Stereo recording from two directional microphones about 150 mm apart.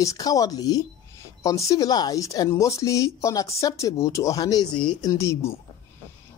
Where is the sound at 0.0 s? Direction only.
20° left (ahead or behind).